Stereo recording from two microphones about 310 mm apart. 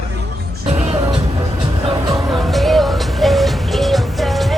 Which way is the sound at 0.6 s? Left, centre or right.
Right.